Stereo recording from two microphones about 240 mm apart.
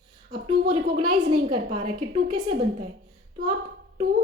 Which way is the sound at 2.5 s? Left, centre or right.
Right.